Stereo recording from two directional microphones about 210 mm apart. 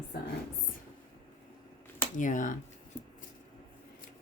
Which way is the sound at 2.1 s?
40° left (ahead or behind).